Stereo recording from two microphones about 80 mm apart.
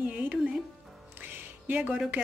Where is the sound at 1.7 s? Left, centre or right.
Centre.